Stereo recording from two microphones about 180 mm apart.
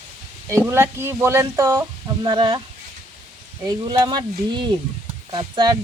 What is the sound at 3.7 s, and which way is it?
Speech, 25° right (ahead or behind).